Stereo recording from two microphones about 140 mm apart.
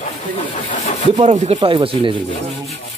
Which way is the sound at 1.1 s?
45° right (ahead or behind).